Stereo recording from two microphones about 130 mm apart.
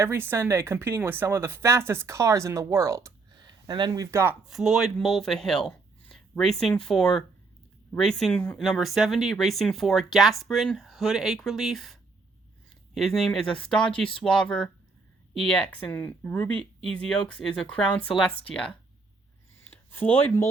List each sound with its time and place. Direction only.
0.0 s speech: 15° right (ahead or behind)
4.4 s speech: centre (ahead or behind)
8.5 s speech: centre (ahead or behind)
19.7 s speech: 15° left (ahead or behind)